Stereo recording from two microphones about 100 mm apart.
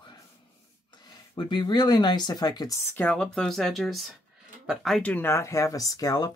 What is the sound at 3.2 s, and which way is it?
Speech, 5° left (ahead or behind).